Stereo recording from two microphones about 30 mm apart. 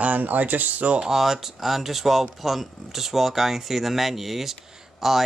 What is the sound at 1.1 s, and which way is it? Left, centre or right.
Speech, centre.